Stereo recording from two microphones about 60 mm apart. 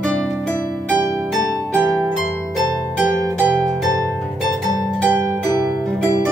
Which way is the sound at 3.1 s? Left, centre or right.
Centre.